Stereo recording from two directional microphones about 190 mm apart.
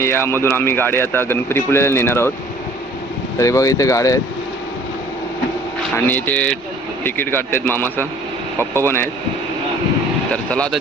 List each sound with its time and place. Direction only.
0.0 s speech: 10° left (ahead or behind)
3.3 s speech: 15° left (ahead or behind)
6.1 s speech: 10° left (ahead or behind)
10.3 s speech: 5° left (ahead or behind)